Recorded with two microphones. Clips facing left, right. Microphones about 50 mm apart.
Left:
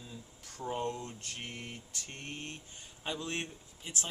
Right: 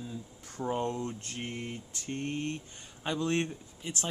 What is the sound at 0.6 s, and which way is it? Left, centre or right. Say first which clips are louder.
Speech: right 5 dB; right.